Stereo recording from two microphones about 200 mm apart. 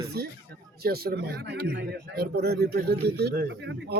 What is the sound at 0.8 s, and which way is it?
Speech, 50° right (ahead or behind).